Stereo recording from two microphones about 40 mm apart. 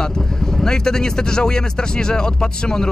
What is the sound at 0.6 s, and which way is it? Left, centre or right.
Speech, centre.